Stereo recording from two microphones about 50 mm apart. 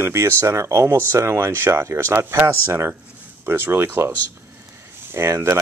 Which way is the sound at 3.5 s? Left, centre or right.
Right.